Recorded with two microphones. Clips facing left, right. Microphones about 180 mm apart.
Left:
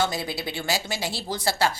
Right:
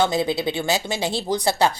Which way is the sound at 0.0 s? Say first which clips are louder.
Right 7 dB; 20° right (ahead or behind).